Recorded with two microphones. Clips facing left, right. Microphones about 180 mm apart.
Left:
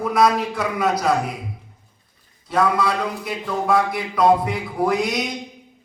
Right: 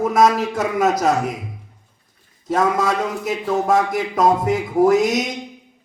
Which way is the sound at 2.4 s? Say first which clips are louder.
Right 1 dB; 45° right (ahead or behind).